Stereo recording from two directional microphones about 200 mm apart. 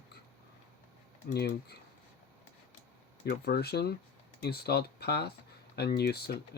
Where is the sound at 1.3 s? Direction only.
55° left (ahead or behind).